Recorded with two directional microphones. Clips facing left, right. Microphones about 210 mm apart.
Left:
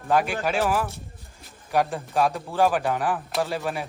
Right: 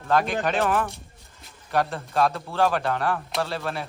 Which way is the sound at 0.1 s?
15° left (ahead or behind).